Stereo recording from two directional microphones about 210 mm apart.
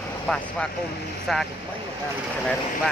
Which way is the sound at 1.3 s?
Centre (ahead or behind).